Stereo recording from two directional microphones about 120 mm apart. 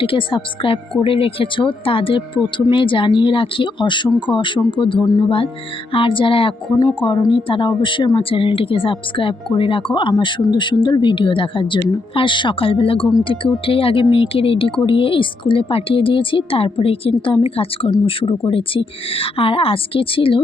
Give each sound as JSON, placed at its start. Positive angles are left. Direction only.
{"t": 0.0, "sound": "speech", "side_deg": 45}